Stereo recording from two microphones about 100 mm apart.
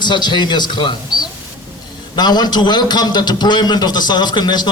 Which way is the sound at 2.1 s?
45° left (ahead or behind).